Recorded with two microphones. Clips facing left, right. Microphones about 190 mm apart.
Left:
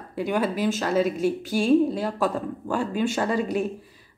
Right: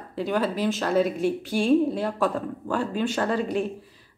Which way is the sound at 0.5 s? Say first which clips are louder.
Left 1 dB; 45° left (ahead or behind).